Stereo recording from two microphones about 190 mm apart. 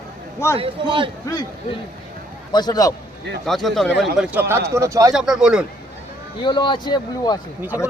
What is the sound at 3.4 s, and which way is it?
A man's voice, centre (ahead or behind).